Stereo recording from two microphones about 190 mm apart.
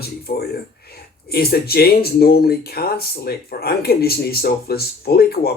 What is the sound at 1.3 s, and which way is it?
Speech, 55° left (ahead or behind).